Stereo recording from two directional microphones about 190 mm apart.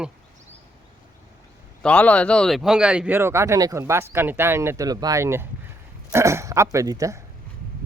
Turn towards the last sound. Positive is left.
turn(degrees=-15)  # may be behind; listen again after turning